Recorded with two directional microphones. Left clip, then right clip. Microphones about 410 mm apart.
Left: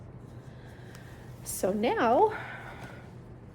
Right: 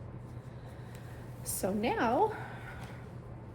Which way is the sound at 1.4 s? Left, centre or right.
Left.